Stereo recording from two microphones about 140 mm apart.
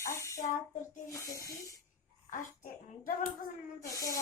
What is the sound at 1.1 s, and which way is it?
Speech, 25° left (ahead or behind).